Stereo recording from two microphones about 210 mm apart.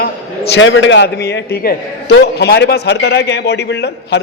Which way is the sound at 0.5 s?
65° left (ahead or behind).